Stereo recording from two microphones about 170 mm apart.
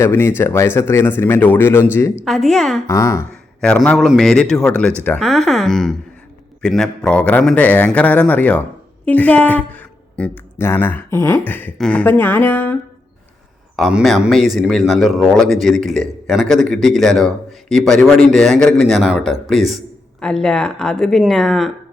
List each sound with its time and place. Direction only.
0.0 s speech: 15° left (ahead or behind)
2.2 s speech: centre (ahead or behind)
2.8 s speech: 20° left (ahead or behind)
3.6 s speech: 5° left (ahead or behind)
13.7 s speech: centre (ahead or behind)